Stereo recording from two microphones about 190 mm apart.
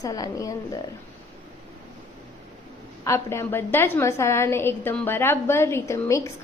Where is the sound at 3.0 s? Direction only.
15° left (ahead or behind).